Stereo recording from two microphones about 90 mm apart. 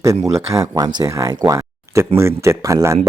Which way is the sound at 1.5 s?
35° right (ahead or behind).